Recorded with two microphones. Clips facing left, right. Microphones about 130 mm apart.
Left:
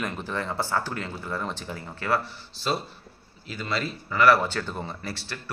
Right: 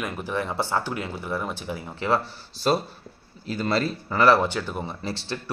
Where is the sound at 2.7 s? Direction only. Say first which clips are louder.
Right 5 dB; 45° right (ahead or behind).